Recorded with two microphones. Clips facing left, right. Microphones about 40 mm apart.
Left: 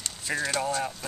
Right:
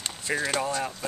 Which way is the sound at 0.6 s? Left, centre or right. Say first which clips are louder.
Even; centre.